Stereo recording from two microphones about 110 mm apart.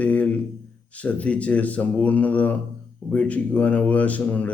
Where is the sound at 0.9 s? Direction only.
10° left (ahead or behind).